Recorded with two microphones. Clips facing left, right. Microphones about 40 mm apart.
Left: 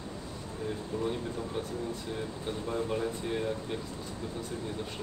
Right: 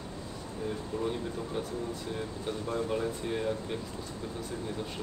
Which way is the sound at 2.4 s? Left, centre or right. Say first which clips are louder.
Right 1 dB; centre.